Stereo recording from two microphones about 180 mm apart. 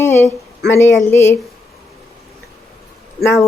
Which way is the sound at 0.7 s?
15° left (ahead or behind).